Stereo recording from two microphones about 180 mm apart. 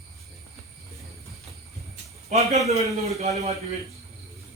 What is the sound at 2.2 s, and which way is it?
Speech, 35° right (ahead or behind).